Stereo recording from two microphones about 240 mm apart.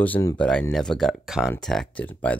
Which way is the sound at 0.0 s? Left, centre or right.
Centre.